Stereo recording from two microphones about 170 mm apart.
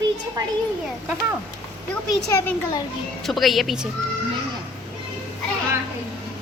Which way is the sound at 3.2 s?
Centre (ahead or behind).